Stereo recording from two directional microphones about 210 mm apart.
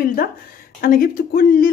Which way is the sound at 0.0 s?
40° left (ahead or behind).